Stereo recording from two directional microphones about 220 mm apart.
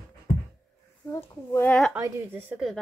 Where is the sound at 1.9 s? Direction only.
10° right (ahead or behind).